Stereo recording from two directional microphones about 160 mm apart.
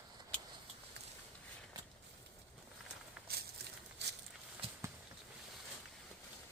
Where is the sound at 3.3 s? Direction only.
75° right (ahead or behind).